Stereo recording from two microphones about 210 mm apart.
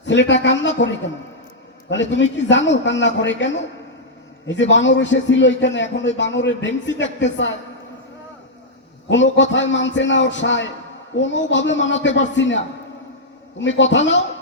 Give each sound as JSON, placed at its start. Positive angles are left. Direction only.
{"t": 0.0, "sound": "a man's voice", "side_deg": 60}
{"t": 9.0, "sound": "a man's voice", "side_deg": 60}
{"t": 13.6, "sound": "a man's voice", "side_deg": 60}